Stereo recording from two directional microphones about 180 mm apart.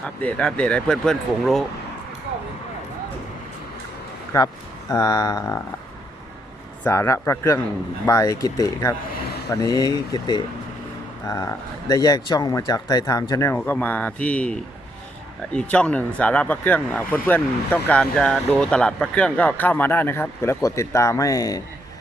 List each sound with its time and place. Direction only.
0.0 s speech: 5° left (ahead or behind)
4.3 s speech: 15° left (ahead or behind)
6.8 s speech: 15° left (ahead or behind)